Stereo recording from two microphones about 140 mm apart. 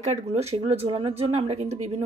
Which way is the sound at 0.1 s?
50° right (ahead or behind).